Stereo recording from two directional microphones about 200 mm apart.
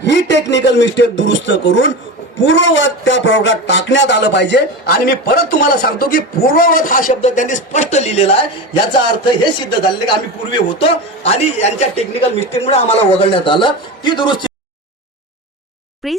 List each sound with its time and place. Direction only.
0.0 s a man's voice: 60° left (ahead or behind); by 9.7 s 25° left (ahead or behind)
10.8 s a man's voice: 30° left (ahead or behind)
16.0 s speech: centre (ahead or behind)